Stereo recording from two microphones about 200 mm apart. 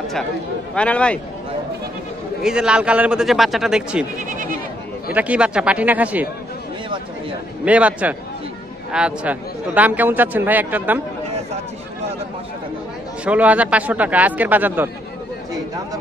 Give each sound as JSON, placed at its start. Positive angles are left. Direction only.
{"t": 0.7, "sound": "speech", "side_deg": 5}
{"t": 2.4, "sound": "a man's voice", "side_deg": -5}
{"t": 4.3, "sound": "bleat", "side_deg": -40}
{"t": 5.1, "sound": "a man's voice", "side_deg": -5}
{"t": 7.6, "sound": "a man's voice", "side_deg": -5}
{"t": 13.2, "sound": "a man's voice", "side_deg": -5}